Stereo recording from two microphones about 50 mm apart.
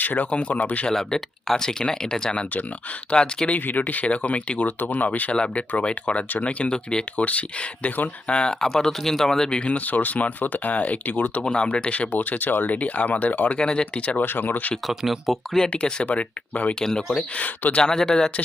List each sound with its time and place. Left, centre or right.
0.0 s speech: left
0.3 s speech: left
0.9 s speech: centre
3.5 s speech: left
5.3 s speech: left
8.3 s speech: centre
9.7 s speech: left
11.4 s speech: centre
13.6 s speech: centre
14.2 s speech: left
14.8 s speech: centre
15.7 s speech: centre
17.8 s speech: centre